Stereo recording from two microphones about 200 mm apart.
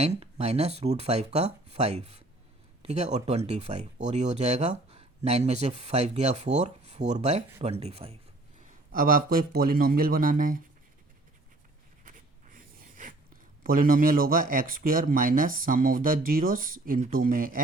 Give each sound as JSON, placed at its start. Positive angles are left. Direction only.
{"t": 0.0, "sound": "speech", "side_deg": -30}
{"t": 8.9, "sound": "speech", "side_deg": -45}
{"t": 12.0, "sound": "speech", "side_deg": -40}